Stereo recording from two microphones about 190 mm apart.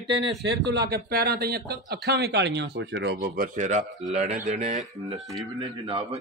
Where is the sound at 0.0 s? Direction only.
65° right (ahead or behind).